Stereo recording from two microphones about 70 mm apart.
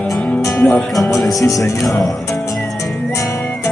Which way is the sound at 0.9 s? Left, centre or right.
Left.